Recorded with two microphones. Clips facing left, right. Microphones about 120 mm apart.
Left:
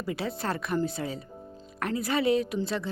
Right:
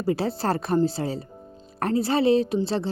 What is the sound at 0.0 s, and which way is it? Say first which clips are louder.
A woman's voice: right 7 dB; 35° right (ahead or behind).